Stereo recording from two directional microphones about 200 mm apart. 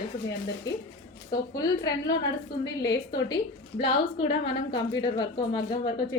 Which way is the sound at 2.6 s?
20° left (ahead or behind).